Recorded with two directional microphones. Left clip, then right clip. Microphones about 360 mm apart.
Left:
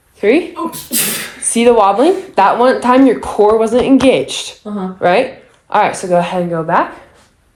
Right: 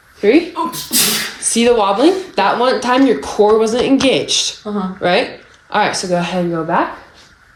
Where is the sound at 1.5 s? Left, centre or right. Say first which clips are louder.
Left 4 dB; centre.